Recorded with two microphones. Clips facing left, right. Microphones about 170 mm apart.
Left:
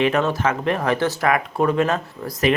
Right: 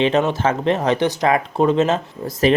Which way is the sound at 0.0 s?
25° right (ahead or behind).